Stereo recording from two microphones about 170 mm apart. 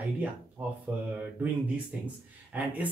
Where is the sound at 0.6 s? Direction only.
10° right (ahead or behind).